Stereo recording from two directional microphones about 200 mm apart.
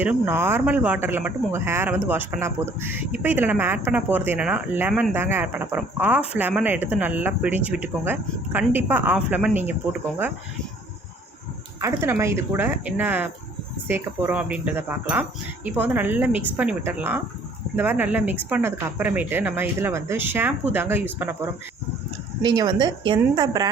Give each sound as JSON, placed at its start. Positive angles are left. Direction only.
{"t": 0.0, "sound": "speech", "side_deg": -10}
{"t": 11.8, "sound": "a woman's voice", "side_deg": -15}